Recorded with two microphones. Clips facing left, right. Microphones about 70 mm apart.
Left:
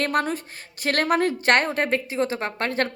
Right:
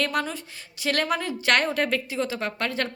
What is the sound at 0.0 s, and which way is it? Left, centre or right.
A woman's voice, left.